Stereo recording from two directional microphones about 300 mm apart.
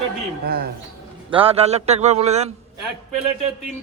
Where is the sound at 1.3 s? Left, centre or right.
Centre.